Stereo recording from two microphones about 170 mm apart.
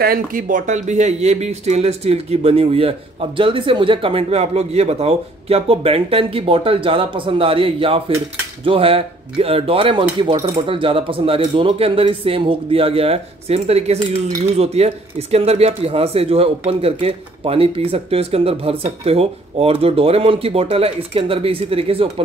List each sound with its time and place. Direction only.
0.0 s speech: 55° right (ahead or behind); by 22.1 s 35° right (ahead or behind)